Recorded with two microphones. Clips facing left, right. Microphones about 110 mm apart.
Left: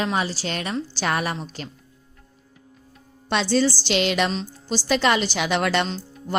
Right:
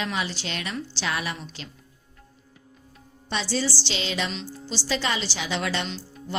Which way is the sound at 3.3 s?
60° left (ahead or behind).